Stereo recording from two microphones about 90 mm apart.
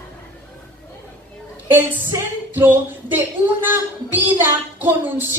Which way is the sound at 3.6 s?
20° right (ahead or behind).